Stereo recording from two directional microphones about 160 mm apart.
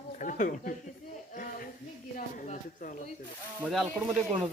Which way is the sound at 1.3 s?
55° left (ahead or behind).